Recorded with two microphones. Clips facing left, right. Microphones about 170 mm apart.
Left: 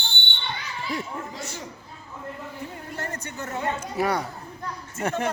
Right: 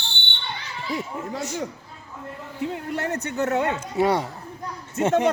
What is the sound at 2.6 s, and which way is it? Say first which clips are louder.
Speech: right 10 dB; 75° right (ahead or behind).